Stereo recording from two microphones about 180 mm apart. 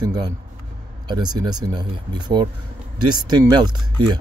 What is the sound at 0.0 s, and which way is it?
Speech, 20° right (ahead or behind).